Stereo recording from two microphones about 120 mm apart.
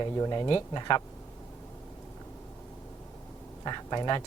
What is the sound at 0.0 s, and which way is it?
Speech, 35° left (ahead or behind).